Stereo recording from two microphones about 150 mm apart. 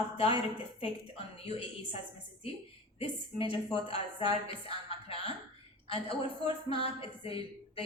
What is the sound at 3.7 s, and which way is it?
A woman's voice, 40° left (ahead or behind).